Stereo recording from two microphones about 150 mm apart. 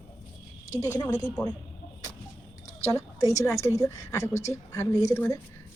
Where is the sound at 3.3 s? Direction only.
20° left (ahead or behind).